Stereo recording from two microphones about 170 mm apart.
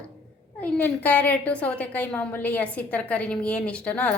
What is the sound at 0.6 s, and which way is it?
A woman's voice, 10° left (ahead or behind).